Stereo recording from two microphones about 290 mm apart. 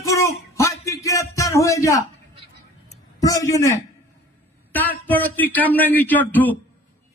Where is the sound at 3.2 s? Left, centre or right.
Centre.